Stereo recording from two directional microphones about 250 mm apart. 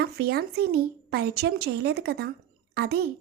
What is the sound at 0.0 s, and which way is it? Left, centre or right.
Speech, right.